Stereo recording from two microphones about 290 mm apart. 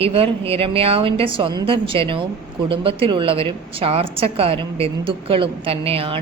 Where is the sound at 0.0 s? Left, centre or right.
Centre.